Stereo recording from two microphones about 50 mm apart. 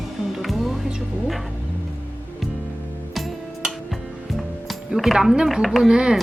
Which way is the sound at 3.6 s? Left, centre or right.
Centre.